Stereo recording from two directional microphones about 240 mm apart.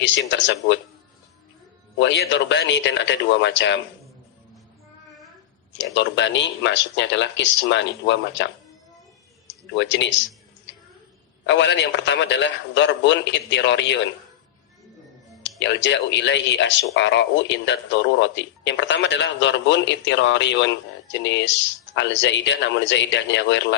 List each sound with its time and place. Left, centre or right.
0.0 s speech: left
2.0 s speech: left
5.7 s speech: left
9.7 s speech: left
11.4 s speech: left
15.4 s speech: left